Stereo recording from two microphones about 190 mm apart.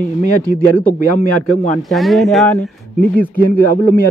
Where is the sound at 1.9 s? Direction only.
Centre (ahead or behind).